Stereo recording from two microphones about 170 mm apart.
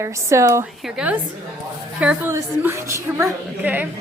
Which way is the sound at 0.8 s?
5° right (ahead or behind).